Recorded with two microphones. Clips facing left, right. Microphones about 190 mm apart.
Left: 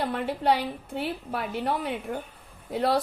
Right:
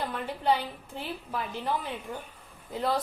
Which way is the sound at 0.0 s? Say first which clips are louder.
Left 4 dB; 65° left (ahead or behind).